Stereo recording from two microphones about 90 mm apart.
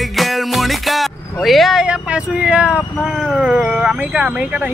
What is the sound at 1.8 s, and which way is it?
Vehicle, 10° right (ahead or behind).